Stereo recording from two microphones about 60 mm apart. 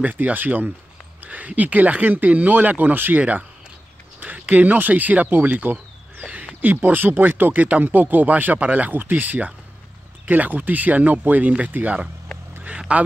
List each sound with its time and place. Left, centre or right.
0.0 s speech: right